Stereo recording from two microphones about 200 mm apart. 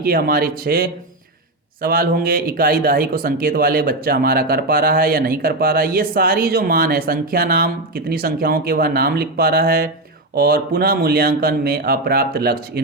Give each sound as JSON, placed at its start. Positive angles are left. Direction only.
{"t": 0.0, "sound": "speech", "side_deg": -50}